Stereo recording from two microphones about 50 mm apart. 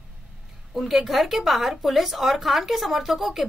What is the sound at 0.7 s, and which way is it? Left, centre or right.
Speech, centre.